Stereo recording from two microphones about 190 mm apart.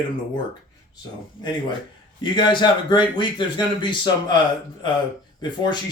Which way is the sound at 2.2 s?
25° left (ahead or behind).